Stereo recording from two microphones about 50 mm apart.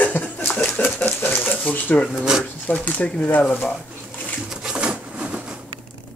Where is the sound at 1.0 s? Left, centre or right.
Left.